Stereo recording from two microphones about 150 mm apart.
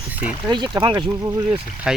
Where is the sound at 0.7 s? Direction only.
30° right (ahead or behind).